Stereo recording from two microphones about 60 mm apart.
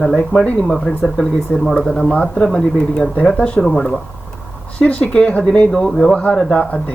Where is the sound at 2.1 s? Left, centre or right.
Left.